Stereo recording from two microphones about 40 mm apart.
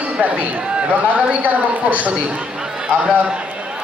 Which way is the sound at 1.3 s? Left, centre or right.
Right.